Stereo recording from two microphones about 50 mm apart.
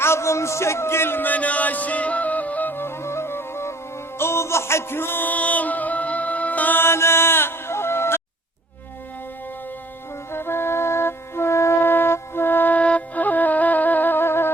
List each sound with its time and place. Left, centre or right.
0.0 s a sound: left
1.3 s music: left
6.7 s music: left
10.3 s music: left
12.7 s flute: left